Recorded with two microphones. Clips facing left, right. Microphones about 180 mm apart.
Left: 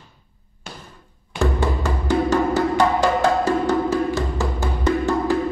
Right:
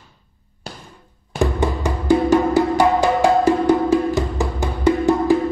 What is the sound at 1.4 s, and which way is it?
Music, 15° right (ahead or behind).